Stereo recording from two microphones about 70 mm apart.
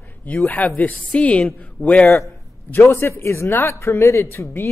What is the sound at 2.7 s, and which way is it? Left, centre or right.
A man's voice, left.